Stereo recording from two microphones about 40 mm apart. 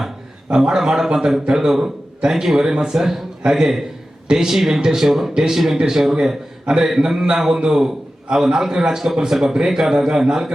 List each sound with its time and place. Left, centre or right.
0.5 s a man's voice: centre